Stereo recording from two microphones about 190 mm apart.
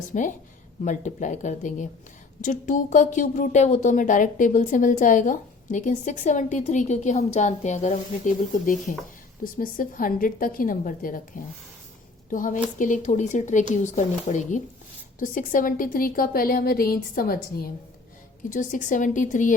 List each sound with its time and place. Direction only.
0.1 s a woman's voice: 40° left (ahead or behind)
12.3 s a woman's voice: 45° left (ahead or behind)